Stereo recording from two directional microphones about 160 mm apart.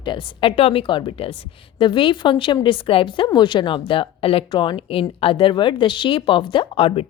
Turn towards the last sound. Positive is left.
turn(degrees=35)  # may be behind; listen again after turning